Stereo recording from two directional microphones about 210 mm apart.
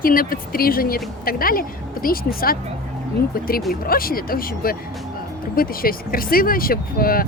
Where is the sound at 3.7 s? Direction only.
45° left (ahead or behind).